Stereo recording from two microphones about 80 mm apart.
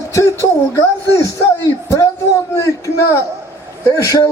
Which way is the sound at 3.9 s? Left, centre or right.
Left.